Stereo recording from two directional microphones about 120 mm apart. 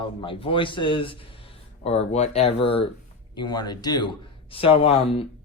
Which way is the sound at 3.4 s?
35° left (ahead or behind).